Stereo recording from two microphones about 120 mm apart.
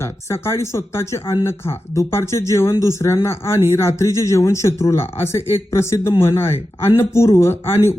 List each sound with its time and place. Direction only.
0.0 s speech: 20° left (ahead or behind)